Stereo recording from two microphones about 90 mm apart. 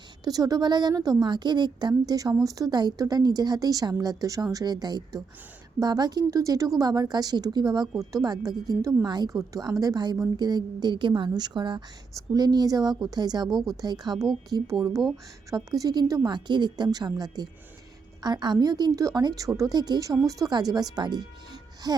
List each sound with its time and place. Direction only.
0.3 s a woman's voice: 45° right (ahead or behind)
9.0 s a woman's voice: 50° right (ahead or behind)
12.1 s a woman's voice: 45° right (ahead or behind)